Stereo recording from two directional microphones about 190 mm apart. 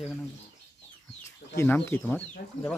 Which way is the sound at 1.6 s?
10° left (ahead or behind).